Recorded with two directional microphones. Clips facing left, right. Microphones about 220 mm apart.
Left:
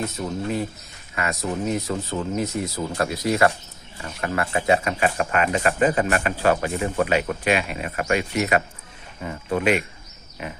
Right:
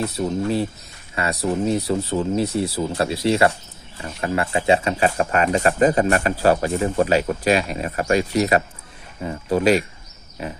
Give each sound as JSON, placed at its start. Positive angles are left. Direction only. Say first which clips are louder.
{"t": 0.0, "sound": "speech", "louder": "right 5 dB", "side_deg": -35}